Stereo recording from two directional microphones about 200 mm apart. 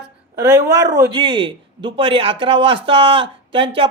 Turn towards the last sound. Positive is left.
turn(degrees=-25)  # may be behind; listen again after turning